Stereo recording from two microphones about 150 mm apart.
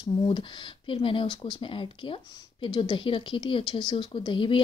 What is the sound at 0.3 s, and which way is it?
Speech, 35° left (ahead or behind).